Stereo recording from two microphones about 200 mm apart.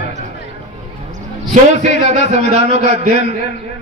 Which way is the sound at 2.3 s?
35° right (ahead or behind).